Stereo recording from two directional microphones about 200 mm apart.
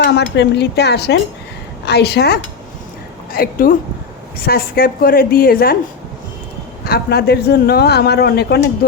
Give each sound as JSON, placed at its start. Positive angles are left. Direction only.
{"t": 0.0, "sound": "a woman's voice", "side_deg": 55}
{"t": 6.8, "sound": "a man's voice", "side_deg": 50}